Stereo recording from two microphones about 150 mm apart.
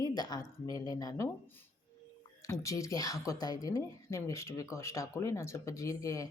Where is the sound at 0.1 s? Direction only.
25° left (ahead or behind).